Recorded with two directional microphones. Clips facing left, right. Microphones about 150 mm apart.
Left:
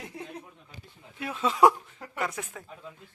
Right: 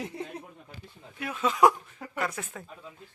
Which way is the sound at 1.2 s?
25° left (ahead or behind).